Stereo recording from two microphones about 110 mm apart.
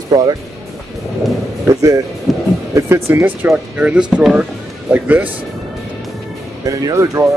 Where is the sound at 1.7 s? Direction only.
30° right (ahead or behind).